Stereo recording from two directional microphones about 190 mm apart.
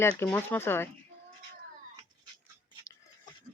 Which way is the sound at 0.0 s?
10° left (ahead or behind).